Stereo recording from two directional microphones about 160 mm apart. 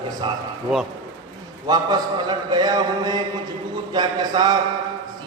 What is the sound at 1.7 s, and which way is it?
A man's voice, 25° right (ahead or behind).